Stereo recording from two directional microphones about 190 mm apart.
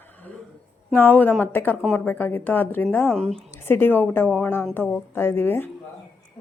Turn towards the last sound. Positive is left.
turn(degrees=10)  # may be behind; listen again after turning